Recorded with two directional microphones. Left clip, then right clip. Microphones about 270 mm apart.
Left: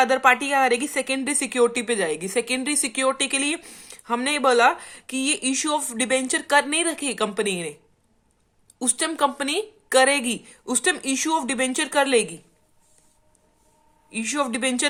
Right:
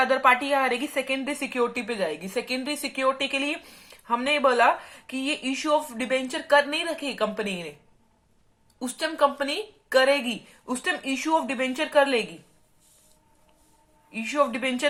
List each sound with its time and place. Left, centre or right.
0.3 s a woman's voice: left
9.0 s a woman's voice: left
14.1 s a woman's voice: left